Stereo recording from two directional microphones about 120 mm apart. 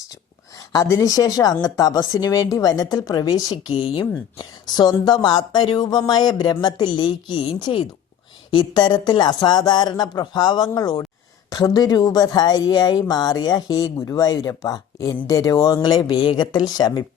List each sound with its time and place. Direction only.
0.7 s speech: 30° left (ahead or behind)